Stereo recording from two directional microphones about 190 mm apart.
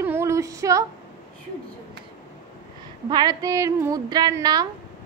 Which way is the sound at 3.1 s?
20° right (ahead or behind).